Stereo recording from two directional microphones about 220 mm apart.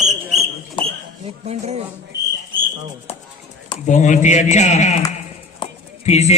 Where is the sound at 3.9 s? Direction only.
35° left (ahead or behind).